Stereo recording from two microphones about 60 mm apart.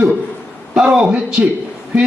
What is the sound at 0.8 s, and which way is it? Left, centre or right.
Speech, centre.